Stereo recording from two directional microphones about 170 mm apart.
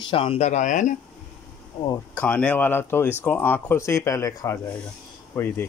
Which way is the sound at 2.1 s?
5° left (ahead or behind).